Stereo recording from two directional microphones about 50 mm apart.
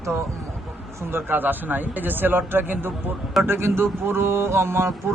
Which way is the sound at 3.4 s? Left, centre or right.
Right.